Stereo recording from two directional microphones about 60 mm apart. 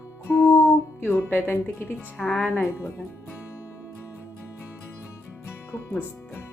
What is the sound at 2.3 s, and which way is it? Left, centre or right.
Speech, left.